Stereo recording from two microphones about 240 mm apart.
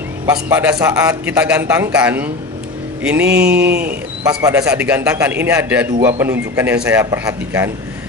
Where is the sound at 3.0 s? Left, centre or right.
Centre.